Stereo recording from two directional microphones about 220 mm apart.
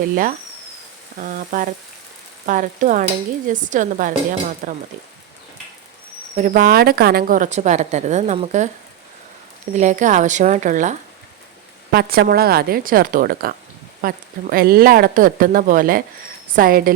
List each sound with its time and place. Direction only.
1.2 s a woman's voice: 35° right (ahead or behind)
6.3 s a woman's voice: 35° right (ahead or behind)
9.7 s a woman's voice: 35° right (ahead or behind)